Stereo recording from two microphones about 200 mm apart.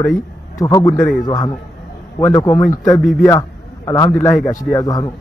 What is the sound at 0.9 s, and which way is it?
Speech, 5° left (ahead or behind).